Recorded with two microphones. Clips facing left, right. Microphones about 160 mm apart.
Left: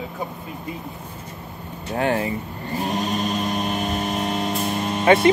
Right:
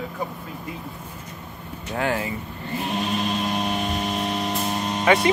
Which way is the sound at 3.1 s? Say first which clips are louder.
Left 1 dB; 45° left (ahead or behind).